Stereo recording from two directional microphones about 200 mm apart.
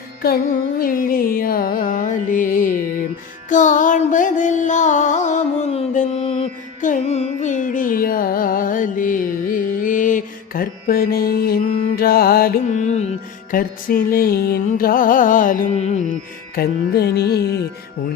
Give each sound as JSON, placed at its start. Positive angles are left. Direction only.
{"t": 0.8, "sound": "music", "side_deg": 45}
{"t": 16.6, "sound": "music", "side_deg": 50}